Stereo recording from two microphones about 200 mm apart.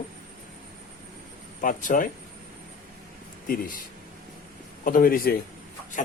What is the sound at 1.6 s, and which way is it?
Speech, 40° left (ahead or behind).